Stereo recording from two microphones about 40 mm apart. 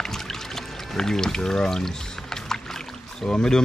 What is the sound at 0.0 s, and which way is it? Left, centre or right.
Pour, centre.